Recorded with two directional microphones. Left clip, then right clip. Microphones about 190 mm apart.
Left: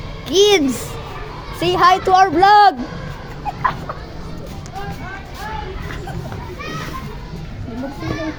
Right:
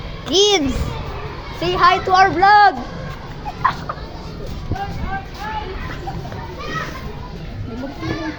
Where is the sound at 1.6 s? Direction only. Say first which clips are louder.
Left 2 dB; 40° left (ahead or behind).